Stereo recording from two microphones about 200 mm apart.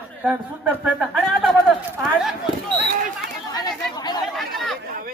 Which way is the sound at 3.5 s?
20° left (ahead or behind).